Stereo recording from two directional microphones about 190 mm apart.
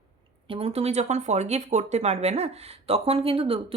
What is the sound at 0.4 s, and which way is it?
Speech, 30° right (ahead or behind).